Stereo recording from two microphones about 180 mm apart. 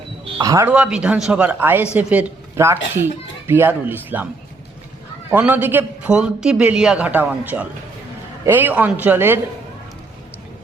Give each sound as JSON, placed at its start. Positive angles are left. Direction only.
{"t": 0.3, "sound": "speech", "side_deg": -20}
{"t": 0.7, "sound": "a man's voice", "side_deg": -5}
{"t": 5.3, "sound": "a man's voice", "side_deg": -10}